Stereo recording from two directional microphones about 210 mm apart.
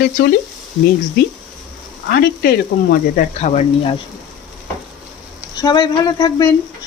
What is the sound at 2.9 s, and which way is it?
Speech, 40° left (ahead or behind).